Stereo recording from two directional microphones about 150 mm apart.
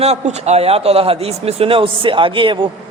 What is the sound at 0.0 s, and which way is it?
Speech, 45° right (ahead or behind).